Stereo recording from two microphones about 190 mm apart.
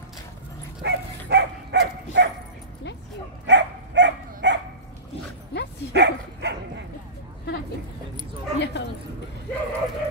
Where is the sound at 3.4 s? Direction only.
65° right (ahead or behind).